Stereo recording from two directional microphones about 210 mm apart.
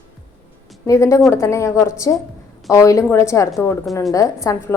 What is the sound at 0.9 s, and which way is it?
A woman's voice, 15° left (ahead or behind).